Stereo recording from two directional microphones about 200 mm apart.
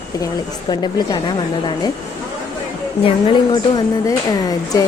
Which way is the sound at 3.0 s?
20° left (ahead or behind).